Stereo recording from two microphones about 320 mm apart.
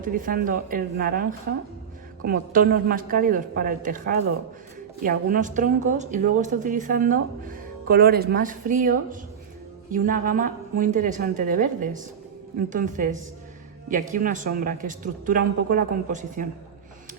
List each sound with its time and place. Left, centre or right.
0.0 s a woman's voice: right